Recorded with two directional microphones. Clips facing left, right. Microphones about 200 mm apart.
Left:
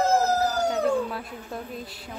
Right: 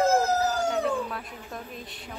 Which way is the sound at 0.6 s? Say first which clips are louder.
Left 3 dB; 30° left (ahead or behind).